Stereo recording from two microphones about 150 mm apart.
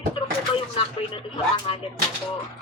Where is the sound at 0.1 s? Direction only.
35° left (ahead or behind).